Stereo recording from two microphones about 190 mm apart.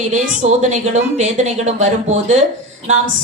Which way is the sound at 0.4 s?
40° right (ahead or behind).